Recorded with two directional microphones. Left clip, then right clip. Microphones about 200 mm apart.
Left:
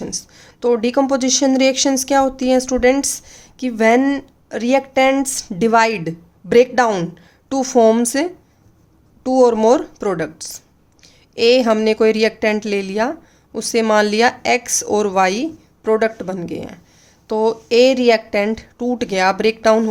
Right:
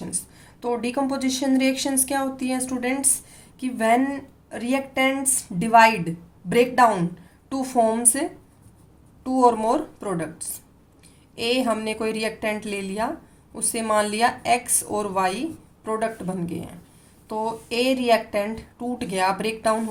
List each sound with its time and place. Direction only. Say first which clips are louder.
0.0 s a woman's voice: left 8 dB; 45° left (ahead or behind)